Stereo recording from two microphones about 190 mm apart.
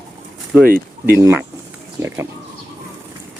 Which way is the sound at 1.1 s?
15° right (ahead or behind).